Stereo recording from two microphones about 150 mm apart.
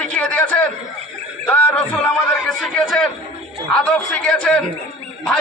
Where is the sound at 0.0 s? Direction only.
5° left (ahead or behind).